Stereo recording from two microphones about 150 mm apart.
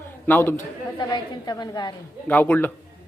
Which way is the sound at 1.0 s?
30° left (ahead or behind).